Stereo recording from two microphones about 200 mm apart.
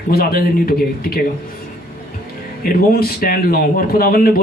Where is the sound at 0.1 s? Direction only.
50° left (ahead or behind).